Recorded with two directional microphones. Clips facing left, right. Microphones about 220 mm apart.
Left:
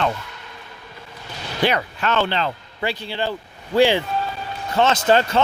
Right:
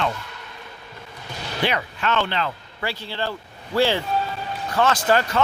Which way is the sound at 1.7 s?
40° left (ahead or behind).